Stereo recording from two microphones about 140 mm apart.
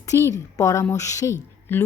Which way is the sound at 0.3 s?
20° left (ahead or behind).